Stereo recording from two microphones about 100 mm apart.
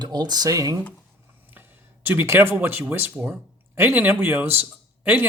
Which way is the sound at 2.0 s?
20° right (ahead or behind).